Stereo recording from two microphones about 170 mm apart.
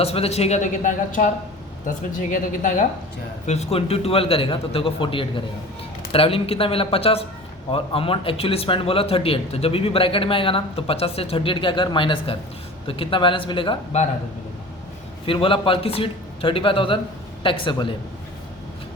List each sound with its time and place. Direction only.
0.0 s speech: 35° left (ahead or behind)
15.3 s speech: 30° left (ahead or behind)